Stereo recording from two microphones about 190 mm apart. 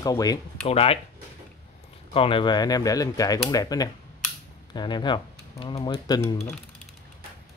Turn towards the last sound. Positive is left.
turn(degrees=25)  # may be behind; listen again after turning